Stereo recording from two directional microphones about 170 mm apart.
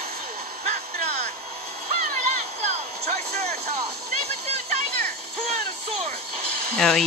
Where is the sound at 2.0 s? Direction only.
45° right (ahead or behind).